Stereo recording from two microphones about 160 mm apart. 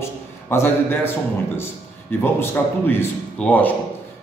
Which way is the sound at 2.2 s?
15° left (ahead or behind).